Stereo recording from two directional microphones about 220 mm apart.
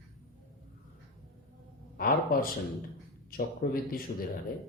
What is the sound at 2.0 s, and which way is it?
Speech, 40° left (ahead or behind).